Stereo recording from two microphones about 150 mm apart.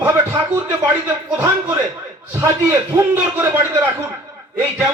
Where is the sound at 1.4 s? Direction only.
15° right (ahead or behind).